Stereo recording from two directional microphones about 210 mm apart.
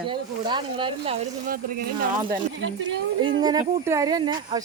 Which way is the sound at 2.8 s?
25° right (ahead or behind).